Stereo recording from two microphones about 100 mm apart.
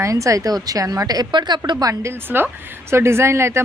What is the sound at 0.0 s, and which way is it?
A woman's voice, 30° right (ahead or behind).